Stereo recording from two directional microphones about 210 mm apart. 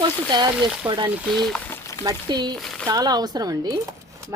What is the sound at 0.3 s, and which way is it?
Speech, 20° right (ahead or behind).